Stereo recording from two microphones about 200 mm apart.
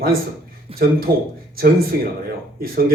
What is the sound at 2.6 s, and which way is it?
Speech, 45° right (ahead or behind).